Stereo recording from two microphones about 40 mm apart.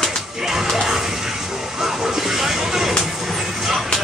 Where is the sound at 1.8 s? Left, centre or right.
Centre.